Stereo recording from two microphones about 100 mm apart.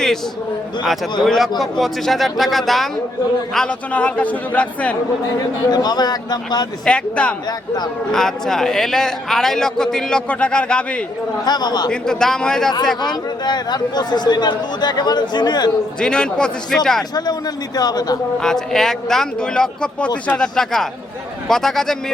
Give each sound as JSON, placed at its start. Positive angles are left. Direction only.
{"t": 1.2, "sound": "a man's voice", "side_deg": 0}
{"t": 5.7, "sound": "speech", "side_deg": 45}
{"t": 6.8, "sound": "a man's voice", "side_deg": 10}
{"t": 11.4, "sound": "speech", "side_deg": 45}
{"t": 11.9, "sound": "a man's voice", "side_deg": 5}
{"t": 13.0, "sound": "speech", "side_deg": 45}
{"t": 16.0, "sound": "a man's voice", "side_deg": 10}
{"t": 17.7, "sound": "speech", "side_deg": 40}
{"t": 18.3, "sound": "a man's voice", "side_deg": 5}